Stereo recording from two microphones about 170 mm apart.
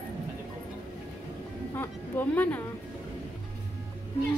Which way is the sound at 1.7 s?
10° left (ahead or behind).